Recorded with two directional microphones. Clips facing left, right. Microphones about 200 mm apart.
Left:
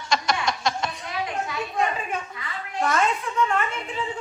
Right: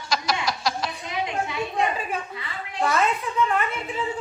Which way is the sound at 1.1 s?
20° right (ahead or behind).